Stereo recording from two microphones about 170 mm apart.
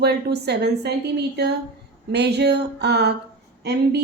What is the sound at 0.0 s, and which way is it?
A woman's voice, 75° right (ahead or behind).